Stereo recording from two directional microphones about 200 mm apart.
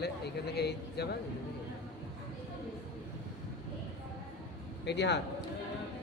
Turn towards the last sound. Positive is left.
turn(degrees=60)  # may be behind; listen again after turning